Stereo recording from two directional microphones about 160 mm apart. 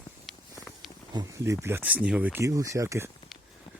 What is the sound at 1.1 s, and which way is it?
Speech, 20° right (ahead or behind).